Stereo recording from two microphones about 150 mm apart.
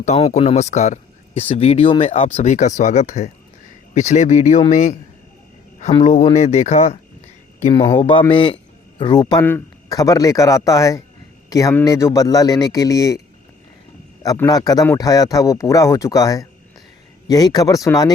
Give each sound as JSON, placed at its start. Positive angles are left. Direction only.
{"t": 0.0, "sound": "a man's voice", "side_deg": 45}
{"t": 14.2, "sound": "speech", "side_deg": 20}